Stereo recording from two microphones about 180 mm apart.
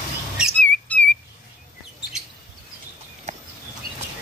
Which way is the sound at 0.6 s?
10° left (ahead or behind).